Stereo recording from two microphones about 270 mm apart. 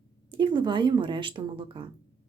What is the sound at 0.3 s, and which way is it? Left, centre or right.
A woman's voice, centre.